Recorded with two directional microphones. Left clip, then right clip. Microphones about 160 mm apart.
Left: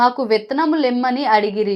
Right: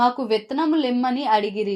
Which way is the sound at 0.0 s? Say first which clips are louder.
Left 4 dB; 20° left (ahead or behind).